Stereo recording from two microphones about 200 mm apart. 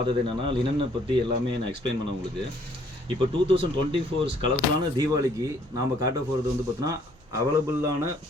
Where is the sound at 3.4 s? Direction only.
25° right (ahead or behind).